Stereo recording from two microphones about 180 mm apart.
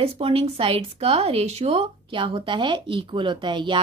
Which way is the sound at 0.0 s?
30° right (ahead or behind).